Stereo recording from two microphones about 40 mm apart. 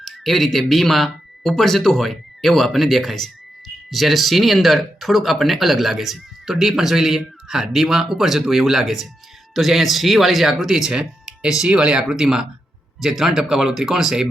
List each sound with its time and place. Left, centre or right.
0.0 s speech: centre